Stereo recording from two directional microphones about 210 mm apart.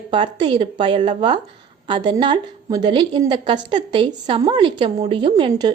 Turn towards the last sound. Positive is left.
turn(degrees=-20)  # may be behind; listen again after turning